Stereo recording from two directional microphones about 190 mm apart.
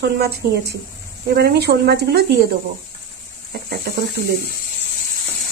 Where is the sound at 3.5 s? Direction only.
50° right (ahead or behind).